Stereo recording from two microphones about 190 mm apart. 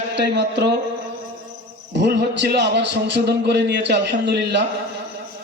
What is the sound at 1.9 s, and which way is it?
A man's voice, 60° right (ahead or behind).